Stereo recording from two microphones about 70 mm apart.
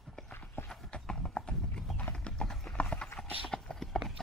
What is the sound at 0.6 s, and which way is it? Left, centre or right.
Clip-clop, centre.